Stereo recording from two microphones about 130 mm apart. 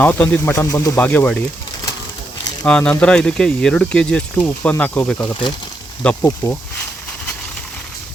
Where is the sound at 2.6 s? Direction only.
10° left (ahead or behind).